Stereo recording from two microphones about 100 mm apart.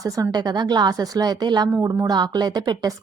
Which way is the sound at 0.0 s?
35° right (ahead or behind).